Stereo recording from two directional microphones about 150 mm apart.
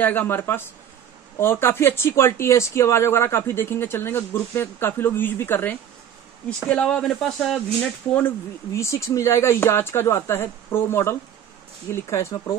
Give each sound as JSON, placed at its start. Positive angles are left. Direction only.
{"t": 0.0, "sound": "speech", "side_deg": 15}
{"t": 8.7, "sound": "speech", "side_deg": 20}